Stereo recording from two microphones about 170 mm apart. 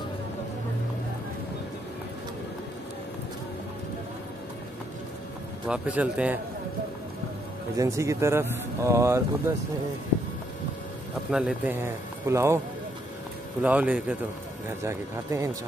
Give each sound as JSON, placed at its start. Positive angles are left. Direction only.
{"t": 5.7, "sound": "speech", "side_deg": -5}
{"t": 7.7, "sound": "speech", "side_deg": -20}
{"t": 11.2, "sound": "speech", "side_deg": -5}
{"t": 13.6, "sound": "speech", "side_deg": -5}